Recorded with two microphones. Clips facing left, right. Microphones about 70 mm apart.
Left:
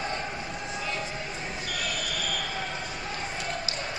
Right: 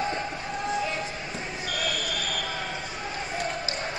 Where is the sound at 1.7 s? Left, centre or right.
Right.